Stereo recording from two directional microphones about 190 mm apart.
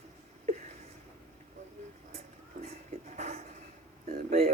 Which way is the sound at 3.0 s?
35° right (ahead or behind).